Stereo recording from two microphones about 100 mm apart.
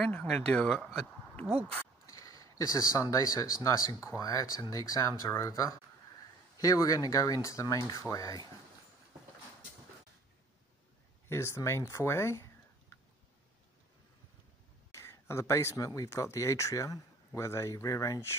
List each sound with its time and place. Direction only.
0.0 s speech: 10° left (ahead or behind)
2.0 s speech: 35° left (ahead or behind)
6.6 s speech: 35° left (ahead or behind)
11.2 s speech: 25° left (ahead or behind)
14.9 s speech: 25° left (ahead or behind)